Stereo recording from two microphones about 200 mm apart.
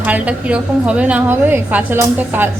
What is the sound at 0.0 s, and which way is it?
A woman's voice, 5° right (ahead or behind).